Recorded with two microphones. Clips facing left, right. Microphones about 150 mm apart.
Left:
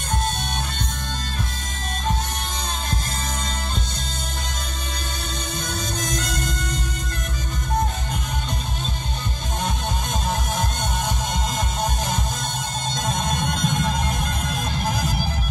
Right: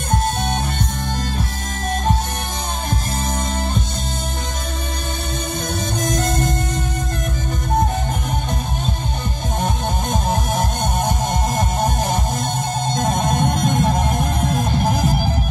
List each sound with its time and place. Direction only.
6.0 s music: 55° right (ahead or behind)
10.2 s music: 55° right (ahead or behind)